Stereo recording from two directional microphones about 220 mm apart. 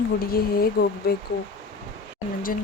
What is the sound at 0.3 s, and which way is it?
Speech, 45° left (ahead or behind).